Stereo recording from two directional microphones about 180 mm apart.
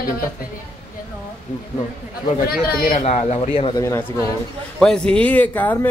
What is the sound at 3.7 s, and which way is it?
Speech, 15° left (ahead or behind).